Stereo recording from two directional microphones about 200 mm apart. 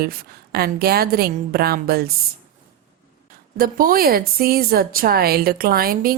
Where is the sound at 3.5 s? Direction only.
45° right (ahead or behind).